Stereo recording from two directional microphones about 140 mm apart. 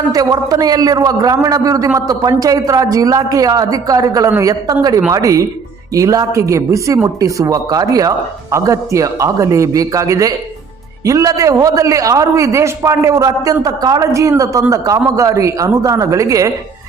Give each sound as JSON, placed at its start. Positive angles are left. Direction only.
{"t": 0.1, "sound": "a man's voice", "side_deg": -25}